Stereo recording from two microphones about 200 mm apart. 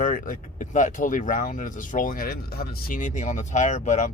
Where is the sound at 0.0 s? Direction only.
40° left (ahead or behind).